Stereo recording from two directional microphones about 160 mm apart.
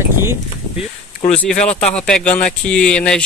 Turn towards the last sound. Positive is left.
turn(degrees=5)  # may be behind; listen again after turning